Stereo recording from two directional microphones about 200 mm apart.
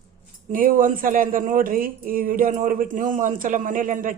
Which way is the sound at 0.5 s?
45° right (ahead or behind).